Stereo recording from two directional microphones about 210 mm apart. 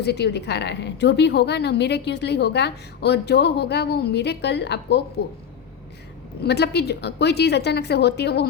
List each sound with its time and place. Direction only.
0.0 s a woman's voice: 50° left (ahead or behind)
6.4 s a woman's voice: 50° left (ahead or behind)